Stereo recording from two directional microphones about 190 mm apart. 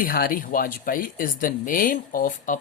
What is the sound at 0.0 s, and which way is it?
Speech, 50° left (ahead or behind).